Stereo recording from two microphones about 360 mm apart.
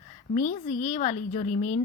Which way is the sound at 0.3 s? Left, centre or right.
Left.